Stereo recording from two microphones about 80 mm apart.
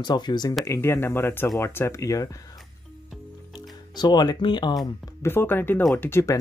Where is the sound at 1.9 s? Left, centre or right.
Left.